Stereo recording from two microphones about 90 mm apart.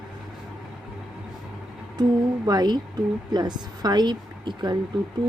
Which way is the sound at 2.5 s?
50° right (ahead or behind).